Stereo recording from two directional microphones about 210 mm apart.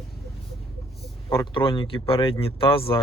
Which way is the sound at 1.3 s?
20° left (ahead or behind).